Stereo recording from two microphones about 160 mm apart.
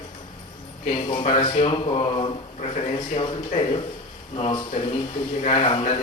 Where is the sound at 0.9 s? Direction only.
35° left (ahead or behind).